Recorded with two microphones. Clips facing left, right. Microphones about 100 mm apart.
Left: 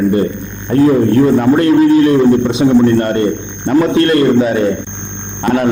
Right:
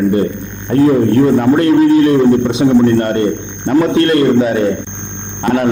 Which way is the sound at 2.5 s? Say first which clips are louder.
Even; 15° left (ahead or behind).